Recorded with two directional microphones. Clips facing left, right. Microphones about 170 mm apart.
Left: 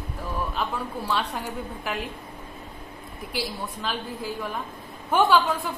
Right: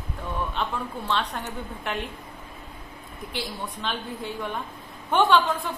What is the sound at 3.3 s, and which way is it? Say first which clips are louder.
A woman's voice: left 2 dB; 5° left (ahead or behind).